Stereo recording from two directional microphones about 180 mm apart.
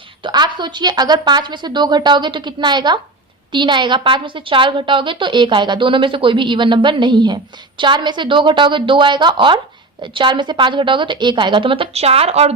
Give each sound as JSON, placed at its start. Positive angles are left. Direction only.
{"t": 0.2, "sound": "a woman's voice", "side_deg": -25}